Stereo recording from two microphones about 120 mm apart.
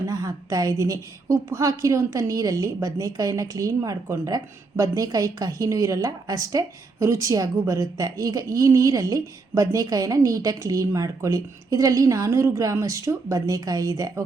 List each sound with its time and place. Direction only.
0.0 s a woman's voice: 30° right (ahead or behind)